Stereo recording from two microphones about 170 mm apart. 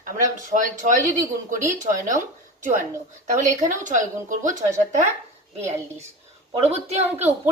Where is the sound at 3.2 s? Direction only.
45° right (ahead or behind).